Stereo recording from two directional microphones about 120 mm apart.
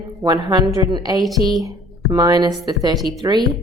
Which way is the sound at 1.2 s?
Centre (ahead or behind).